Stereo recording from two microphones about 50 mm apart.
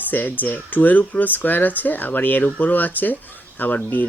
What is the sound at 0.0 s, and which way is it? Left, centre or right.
Speech, left.